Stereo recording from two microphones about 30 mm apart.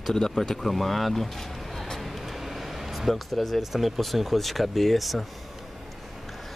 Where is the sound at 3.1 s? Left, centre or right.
Centre.